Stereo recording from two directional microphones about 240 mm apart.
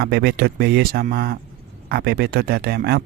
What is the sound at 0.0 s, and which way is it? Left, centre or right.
Speech, right.